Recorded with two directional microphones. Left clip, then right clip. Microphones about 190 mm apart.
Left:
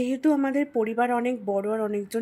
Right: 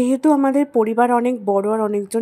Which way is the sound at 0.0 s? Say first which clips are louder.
Right 8 dB; 30° right (ahead or behind).